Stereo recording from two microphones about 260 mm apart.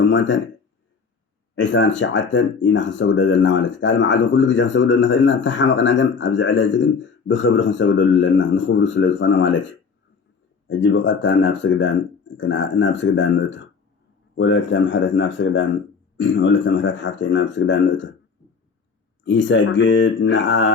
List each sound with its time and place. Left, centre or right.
0.0 s speech: left
1.5 s speech: left
19.2 s speech: left